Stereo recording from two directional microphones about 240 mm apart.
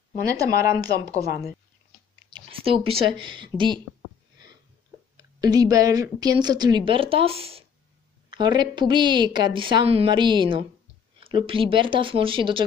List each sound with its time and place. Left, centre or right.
0.3 s a woman's voice: centre
2.2 s speech: right
5.1 s a woman's voice: centre